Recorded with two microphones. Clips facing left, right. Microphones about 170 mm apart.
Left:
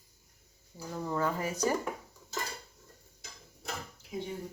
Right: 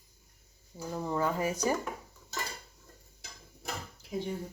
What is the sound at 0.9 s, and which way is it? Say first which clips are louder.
Speech: right 1 dB; 15° right (ahead or behind).